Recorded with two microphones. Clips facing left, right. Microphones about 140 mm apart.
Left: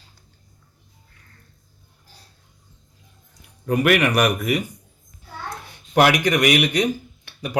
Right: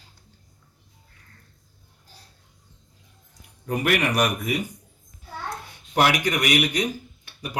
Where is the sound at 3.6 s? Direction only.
75° left (ahead or behind).